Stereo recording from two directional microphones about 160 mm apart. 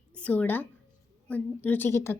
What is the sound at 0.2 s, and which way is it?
A woman's voice, 10° left (ahead or behind).